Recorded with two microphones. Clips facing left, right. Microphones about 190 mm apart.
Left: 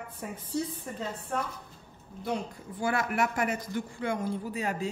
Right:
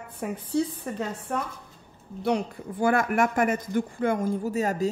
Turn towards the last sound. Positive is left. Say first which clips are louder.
# right 7 dB
turn(degrees=-40)  # may be behind; listen again after turning